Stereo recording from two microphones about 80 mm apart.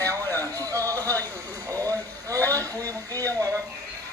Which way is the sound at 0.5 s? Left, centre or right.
Right.